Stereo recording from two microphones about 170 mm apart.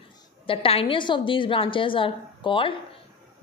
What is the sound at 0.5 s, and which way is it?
A woman's voice, 35° left (ahead or behind).